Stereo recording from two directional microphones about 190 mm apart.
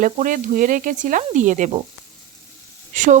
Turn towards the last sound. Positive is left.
turn(degrees=-40)  # may be behind; listen again after turning